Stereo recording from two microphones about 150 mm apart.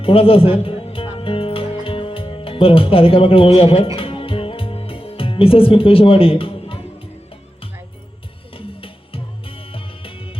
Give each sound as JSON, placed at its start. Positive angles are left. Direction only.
{"t": 0.0, "sound": "music", "side_deg": 40}
{"t": 8.5, "sound": "music", "side_deg": 40}